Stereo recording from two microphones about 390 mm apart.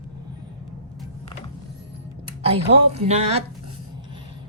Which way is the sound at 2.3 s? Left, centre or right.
Centre.